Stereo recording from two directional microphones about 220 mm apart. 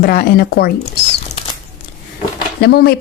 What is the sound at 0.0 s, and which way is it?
Speech, 40° left (ahead or behind).